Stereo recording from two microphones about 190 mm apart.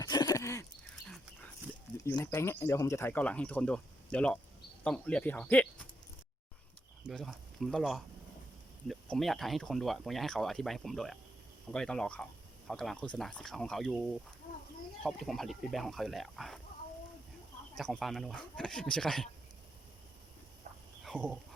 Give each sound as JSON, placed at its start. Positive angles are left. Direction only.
{"t": 0.0, "sound": "horse", "side_deg": 20}
{"t": 2.0, "sound": "speech", "side_deg": 15}
{"t": 7.1, "sound": "speech", "side_deg": 0}
{"t": 17.7, "sound": "speech", "side_deg": 0}
{"t": 21.0, "sound": "dog", "side_deg": 0}